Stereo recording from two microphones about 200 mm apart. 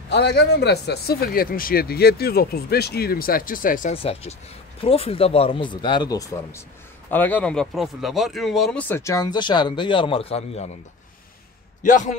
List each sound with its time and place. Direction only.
0.1 s speech: 55° left (ahead or behind)
3.9 s speech: 30° left (ahead or behind)
11.8 s speech: 40° left (ahead or behind)